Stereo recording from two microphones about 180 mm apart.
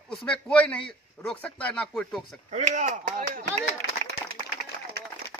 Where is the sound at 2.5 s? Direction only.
40° right (ahead or behind).